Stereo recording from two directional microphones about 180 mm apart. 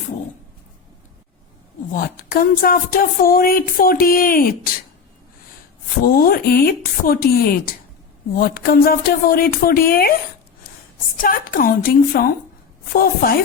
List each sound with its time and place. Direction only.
1.9 s speech: 50° left (ahead or behind)
6.1 s speech: 55° left (ahead or behind)
11.2 s speech: 50° left (ahead or behind)